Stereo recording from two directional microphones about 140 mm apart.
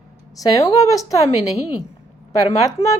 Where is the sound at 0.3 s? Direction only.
25° left (ahead or behind).